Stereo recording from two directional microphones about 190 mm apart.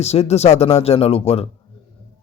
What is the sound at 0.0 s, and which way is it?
Speech, 35° left (ahead or behind).